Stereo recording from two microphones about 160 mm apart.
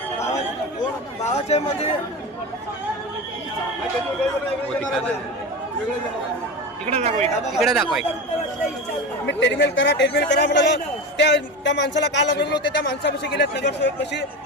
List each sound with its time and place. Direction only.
1.3 s speech: 40° left (ahead or behind)
6.9 s speech: 40° right (ahead or behind)
7.6 s speech: 5° right (ahead or behind)
9.2 s speech: 90° left